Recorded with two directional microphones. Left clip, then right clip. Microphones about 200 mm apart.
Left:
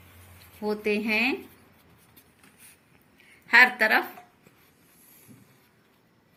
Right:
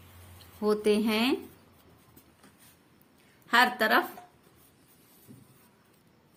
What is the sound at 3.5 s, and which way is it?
Speech, 40° right (ahead or behind).